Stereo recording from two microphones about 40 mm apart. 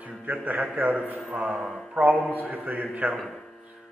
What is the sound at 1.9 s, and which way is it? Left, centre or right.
Speech, right.